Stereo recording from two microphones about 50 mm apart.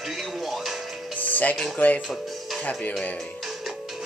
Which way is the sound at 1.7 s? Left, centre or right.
Left.